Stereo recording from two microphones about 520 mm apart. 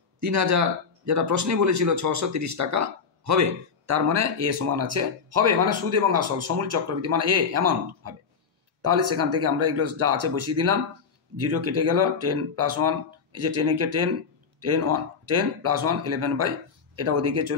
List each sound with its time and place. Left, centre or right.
0.2 s speech: right